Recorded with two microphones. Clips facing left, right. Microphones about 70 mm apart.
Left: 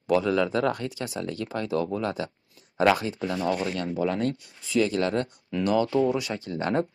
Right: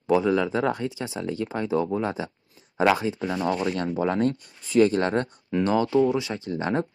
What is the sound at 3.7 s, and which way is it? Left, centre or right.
Speech, right.